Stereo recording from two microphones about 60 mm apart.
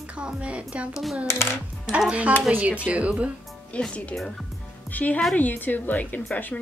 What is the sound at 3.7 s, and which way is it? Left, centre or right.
Speech, left.